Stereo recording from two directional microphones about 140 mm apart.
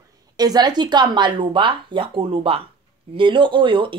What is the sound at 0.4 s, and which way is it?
Speech, 30° right (ahead or behind).